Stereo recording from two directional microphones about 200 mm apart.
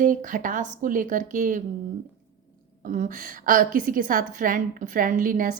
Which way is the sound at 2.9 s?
40° right (ahead or behind).